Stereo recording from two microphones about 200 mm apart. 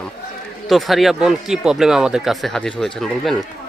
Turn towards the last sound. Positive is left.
turn(degrees=0)  # may be behind; listen again after turning